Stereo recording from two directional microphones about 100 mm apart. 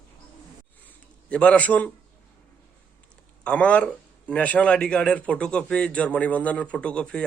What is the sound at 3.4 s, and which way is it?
Speech, 10° left (ahead or behind).